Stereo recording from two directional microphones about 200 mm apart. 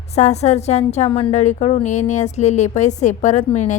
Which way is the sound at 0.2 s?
35° left (ahead or behind).